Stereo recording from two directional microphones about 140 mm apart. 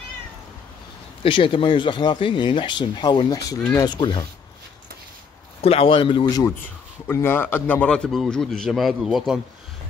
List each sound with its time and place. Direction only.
1.2 s speech: 40° left (ahead or behind)
5.6 s speech: 45° left (ahead or behind)
6.2 s a man's voice: 25° left (ahead or behind); by 9.4 s centre (ahead or behind)